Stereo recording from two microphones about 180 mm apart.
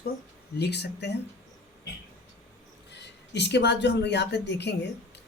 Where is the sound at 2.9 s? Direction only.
70° left (ahead or behind).